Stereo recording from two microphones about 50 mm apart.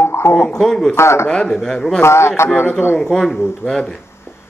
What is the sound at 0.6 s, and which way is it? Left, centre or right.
Speech, centre.